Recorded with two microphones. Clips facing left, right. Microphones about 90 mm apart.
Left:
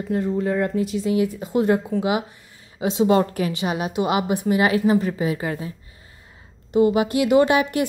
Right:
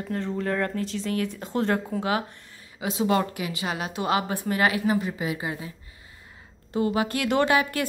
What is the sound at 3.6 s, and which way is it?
A woman's voice, 20° left (ahead or behind).